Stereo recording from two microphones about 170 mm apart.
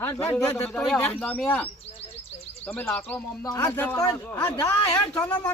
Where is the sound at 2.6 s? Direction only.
10° left (ahead or behind).